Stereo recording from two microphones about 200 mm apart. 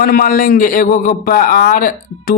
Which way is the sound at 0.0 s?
45° left (ahead or behind).